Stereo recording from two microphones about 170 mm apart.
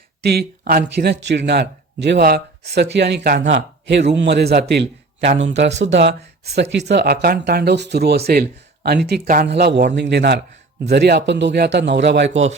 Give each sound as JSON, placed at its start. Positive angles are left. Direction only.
{"t": 0.2, "sound": "speech", "side_deg": -70}
{"t": 3.4, "sound": "a man's voice", "side_deg": -90}
{"t": 5.4, "sound": "a man's voice", "side_deg": -90}